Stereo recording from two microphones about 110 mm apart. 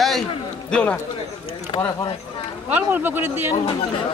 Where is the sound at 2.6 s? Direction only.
15° right (ahead or behind).